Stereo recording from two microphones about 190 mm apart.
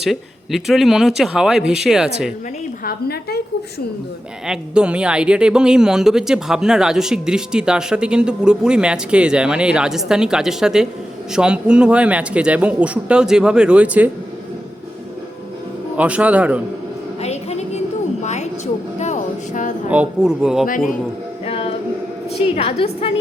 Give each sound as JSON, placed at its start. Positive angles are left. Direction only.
{"t": 0.0, "sound": "speech", "side_deg": 0}
{"t": 2.8, "sound": "a woman's voice", "side_deg": 55}
{"t": 4.4, "sound": "speech", "side_deg": -5}
{"t": 16.0, "sound": "speech", "side_deg": -5}
{"t": 17.2, "sound": "a sound", "side_deg": 35}
{"t": 19.9, "sound": "speech", "side_deg": -5}
{"t": 21.4, "sound": "music", "side_deg": 30}
{"t": 22.4, "sound": "a woman's voice", "side_deg": 30}